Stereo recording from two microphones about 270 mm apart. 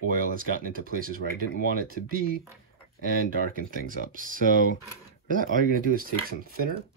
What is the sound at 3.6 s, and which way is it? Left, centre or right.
Speech, right.